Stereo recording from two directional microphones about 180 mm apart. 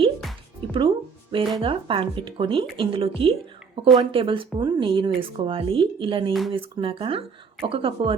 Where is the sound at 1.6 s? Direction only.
30° right (ahead or behind).